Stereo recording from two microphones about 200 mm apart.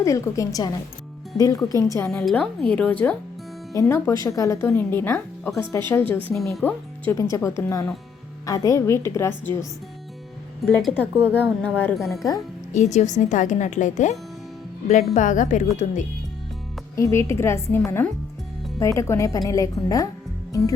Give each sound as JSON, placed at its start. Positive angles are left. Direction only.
{"t": 0.0, "sound": "speech", "side_deg": 15}
{"t": 2.0, "sound": "speech", "side_deg": 5}
{"t": 10.7, "sound": "speech", "side_deg": 5}
{"t": 12.7, "sound": "speech", "side_deg": 35}
{"t": 16.9, "sound": "speech", "side_deg": 15}